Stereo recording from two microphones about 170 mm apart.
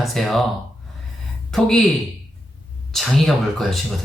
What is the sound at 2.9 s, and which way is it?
Speech, centre (ahead or behind).